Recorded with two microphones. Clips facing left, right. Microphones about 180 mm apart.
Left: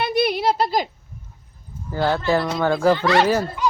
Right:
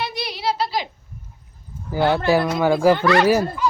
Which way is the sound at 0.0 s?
55° left (ahead or behind).